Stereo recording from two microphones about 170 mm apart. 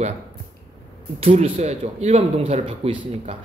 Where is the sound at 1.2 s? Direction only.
35° right (ahead or behind).